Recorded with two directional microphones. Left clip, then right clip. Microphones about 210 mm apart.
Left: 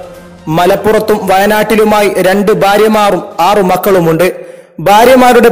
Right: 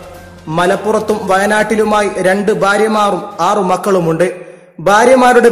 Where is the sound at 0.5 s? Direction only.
30° left (ahead or behind).